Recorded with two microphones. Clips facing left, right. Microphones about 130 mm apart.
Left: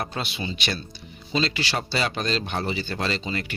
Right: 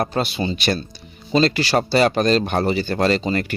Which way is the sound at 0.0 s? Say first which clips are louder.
Right 9 dB; 40° right (ahead or behind).